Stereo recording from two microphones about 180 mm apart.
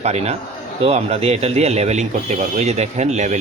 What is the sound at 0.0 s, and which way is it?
Speech, 35° right (ahead or behind).